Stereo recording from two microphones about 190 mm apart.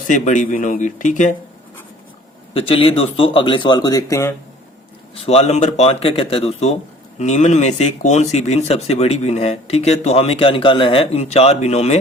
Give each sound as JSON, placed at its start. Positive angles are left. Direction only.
{"t": 0.1, "sound": "speech", "side_deg": 40}
{"t": 2.5, "sound": "speech", "side_deg": 30}
{"t": 5.1, "sound": "speech", "side_deg": 30}